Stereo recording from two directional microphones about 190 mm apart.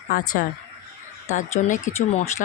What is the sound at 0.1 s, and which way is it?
Speech, 45° left (ahead or behind).